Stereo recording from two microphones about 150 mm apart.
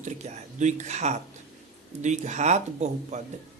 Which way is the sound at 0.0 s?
50° right (ahead or behind).